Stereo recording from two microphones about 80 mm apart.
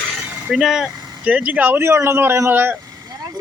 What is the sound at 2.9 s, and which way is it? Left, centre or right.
Vehicle, right.